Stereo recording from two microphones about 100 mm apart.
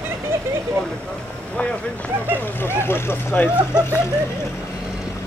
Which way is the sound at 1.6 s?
15° left (ahead or behind).